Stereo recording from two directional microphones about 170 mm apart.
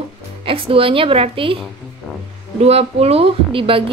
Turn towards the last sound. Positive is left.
turn(degrees=-30)  # may be behind; listen again after turning